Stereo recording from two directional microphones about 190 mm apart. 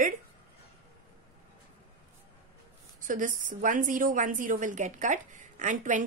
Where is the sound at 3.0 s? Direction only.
45° right (ahead or behind).